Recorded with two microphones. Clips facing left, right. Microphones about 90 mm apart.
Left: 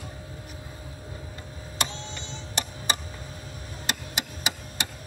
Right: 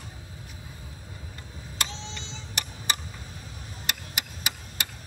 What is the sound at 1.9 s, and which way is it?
Cash register, 90° right.